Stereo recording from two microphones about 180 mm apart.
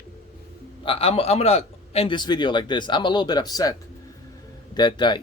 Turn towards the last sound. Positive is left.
turn(degrees=25)  # may be behind; listen again after turning